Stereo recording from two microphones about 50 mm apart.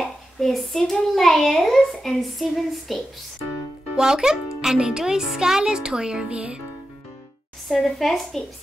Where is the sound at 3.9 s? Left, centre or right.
Centre.